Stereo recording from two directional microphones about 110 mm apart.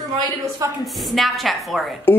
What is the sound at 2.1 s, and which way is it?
Speech, 20° left (ahead or behind).